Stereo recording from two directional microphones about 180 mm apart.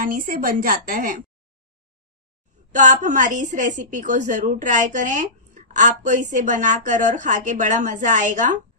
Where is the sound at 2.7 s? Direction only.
45° right (ahead or behind).